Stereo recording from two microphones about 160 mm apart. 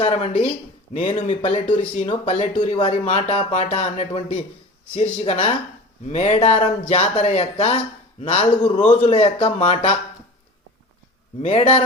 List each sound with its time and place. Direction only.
0.0 s speech: 40° left (ahead or behind)
11.4 s speech: 40° left (ahead or behind)